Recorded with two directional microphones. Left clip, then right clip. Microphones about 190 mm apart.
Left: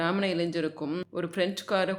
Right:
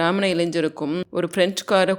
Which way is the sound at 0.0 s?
30° right (ahead or behind).